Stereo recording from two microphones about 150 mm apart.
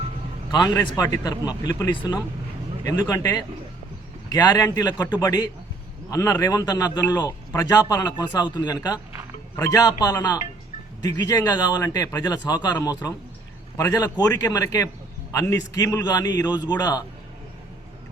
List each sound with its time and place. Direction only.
0.5 s speech: 25° left (ahead or behind)